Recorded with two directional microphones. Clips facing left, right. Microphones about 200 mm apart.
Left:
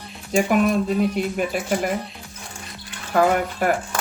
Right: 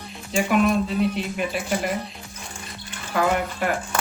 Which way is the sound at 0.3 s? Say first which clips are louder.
Left 2 dB; 45° left (ahead or behind).